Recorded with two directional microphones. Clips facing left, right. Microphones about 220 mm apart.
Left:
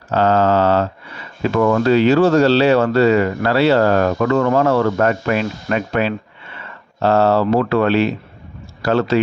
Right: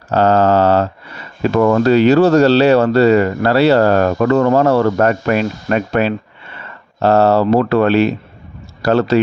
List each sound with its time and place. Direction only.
0.1 s speech: 40° right (ahead or behind)